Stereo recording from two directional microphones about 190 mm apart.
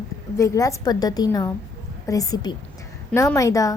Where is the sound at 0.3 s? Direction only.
15° left (ahead or behind).